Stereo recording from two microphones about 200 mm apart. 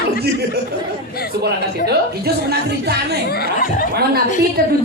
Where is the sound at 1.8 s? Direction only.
55° right (ahead or behind).